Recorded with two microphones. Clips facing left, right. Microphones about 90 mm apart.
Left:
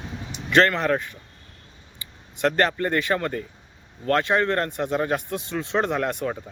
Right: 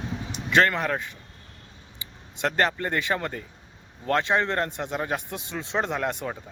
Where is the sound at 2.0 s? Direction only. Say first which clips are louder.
Left 4 dB; 20° right (ahead or behind).